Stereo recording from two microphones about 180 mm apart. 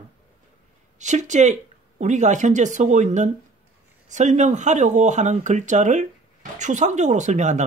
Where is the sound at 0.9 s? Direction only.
40° right (ahead or behind).